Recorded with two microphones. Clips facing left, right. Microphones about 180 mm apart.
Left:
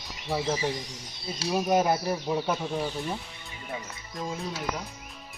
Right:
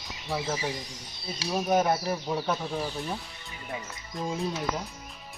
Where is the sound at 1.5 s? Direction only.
5° left (ahead or behind).